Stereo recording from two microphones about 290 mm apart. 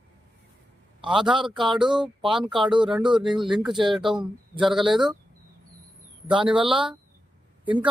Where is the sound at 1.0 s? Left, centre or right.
Centre.